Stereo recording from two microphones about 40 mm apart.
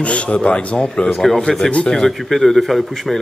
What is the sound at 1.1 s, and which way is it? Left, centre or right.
Speech, centre.